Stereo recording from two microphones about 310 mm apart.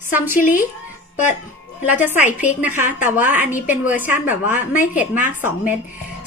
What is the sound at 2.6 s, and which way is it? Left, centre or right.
Speech, centre.